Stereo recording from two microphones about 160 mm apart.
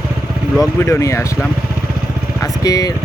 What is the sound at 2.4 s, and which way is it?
Speech, 20° left (ahead or behind).